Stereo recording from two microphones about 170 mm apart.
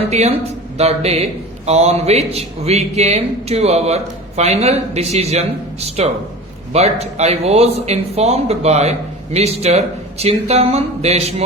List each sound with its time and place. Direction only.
0.1 s speech: 40° right (ahead or behind)